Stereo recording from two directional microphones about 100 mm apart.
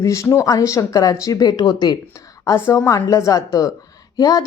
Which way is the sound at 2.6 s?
30° left (ahead or behind).